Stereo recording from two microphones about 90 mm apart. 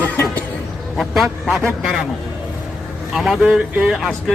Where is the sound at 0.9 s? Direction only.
Centre (ahead or behind).